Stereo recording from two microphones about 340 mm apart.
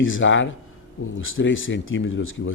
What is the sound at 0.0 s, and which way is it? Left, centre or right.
Speech, left.